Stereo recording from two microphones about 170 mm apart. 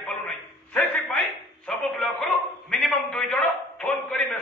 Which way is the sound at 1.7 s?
5° left (ahead or behind).